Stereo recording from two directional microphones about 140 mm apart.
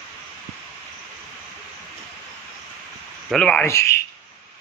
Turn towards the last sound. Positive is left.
turn(degrees=20)  # may be behind; listen again after turning